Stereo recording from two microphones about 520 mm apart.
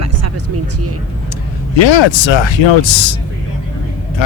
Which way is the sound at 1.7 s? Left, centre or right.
Left.